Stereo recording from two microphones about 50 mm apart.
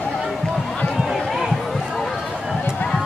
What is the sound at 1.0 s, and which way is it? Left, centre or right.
Run, centre.